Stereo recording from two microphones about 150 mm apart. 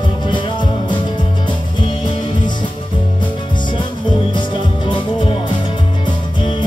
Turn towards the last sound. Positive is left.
turn(degrees=30)  # may be behind; listen again after turning